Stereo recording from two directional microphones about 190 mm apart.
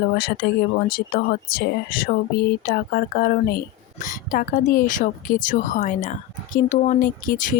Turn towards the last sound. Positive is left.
turn(degrees=45)  # may be behind; listen again after turning